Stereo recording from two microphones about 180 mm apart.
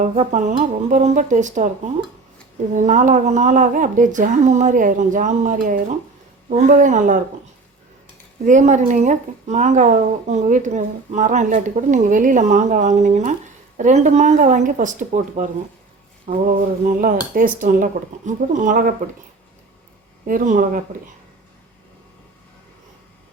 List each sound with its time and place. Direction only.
0.0 s speech: 45° right (ahead or behind)
8.4 s speech: 45° right (ahead or behind)
20.2 s speech: 45° right (ahead or behind)